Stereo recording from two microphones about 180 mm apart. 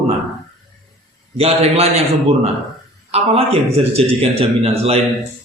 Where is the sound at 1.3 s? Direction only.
35° right (ahead or behind).